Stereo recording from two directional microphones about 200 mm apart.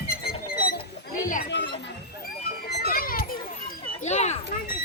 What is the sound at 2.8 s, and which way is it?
Children playing, 45° left (ahead or behind).